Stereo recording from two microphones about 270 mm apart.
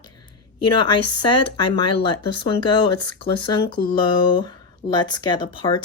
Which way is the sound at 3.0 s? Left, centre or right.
Centre.